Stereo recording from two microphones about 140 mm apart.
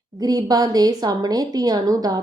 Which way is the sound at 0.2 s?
25° right (ahead or behind).